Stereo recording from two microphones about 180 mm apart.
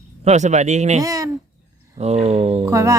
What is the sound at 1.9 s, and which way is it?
Speech, 35° right (ahead or behind).